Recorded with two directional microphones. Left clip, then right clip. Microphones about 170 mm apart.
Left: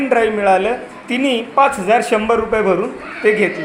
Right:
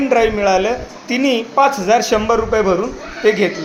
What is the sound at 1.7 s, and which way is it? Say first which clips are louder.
Speech: right 1 dB; centre (ahead or behind).